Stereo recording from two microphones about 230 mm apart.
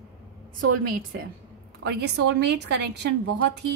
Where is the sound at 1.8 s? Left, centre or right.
Right.